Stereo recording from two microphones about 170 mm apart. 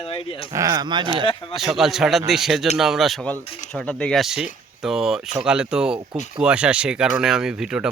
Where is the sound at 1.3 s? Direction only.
30° left (ahead or behind).